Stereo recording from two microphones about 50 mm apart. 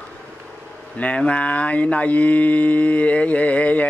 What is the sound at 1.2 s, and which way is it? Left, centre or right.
Mantra, left.